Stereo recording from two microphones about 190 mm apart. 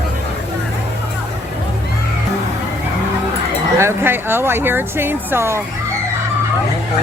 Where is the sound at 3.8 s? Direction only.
10° right (ahead or behind).